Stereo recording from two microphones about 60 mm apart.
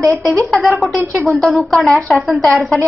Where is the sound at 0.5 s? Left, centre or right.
Centre.